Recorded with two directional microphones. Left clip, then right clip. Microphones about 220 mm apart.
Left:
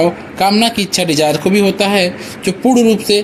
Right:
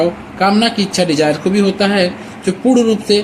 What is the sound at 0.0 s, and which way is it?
Speech, 20° left (ahead or behind).